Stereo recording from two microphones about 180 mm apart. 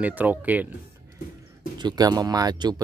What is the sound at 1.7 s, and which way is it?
Speech, 25° right (ahead or behind).